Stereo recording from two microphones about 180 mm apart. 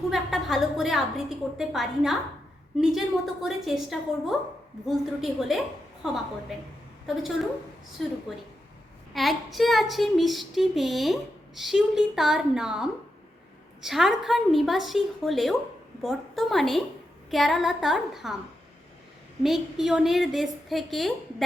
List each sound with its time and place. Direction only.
0.1 s speech: centre (ahead or behind)
3.4 s speech: centre (ahead or behind)
19.4 s speech: centre (ahead or behind)